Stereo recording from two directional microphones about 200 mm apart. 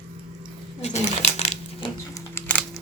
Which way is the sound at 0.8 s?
35° left (ahead or behind).